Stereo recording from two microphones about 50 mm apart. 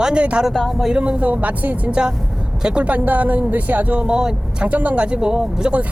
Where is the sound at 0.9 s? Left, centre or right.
Right.